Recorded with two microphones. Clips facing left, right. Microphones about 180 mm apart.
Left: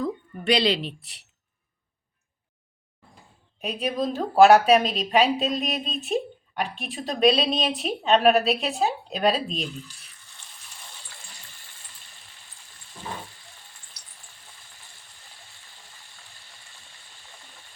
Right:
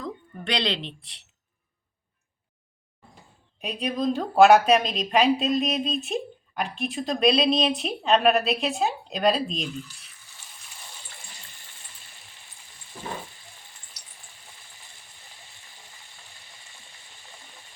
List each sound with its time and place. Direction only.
0.0 s a woman's voice: 5° left (ahead or behind)
3.6 s speech: centre (ahead or behind)